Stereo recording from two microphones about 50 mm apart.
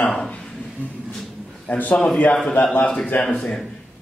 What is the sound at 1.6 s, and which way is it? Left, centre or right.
A man's voice, left.